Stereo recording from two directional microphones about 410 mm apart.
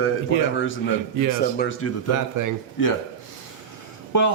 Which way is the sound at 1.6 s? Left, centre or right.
Left.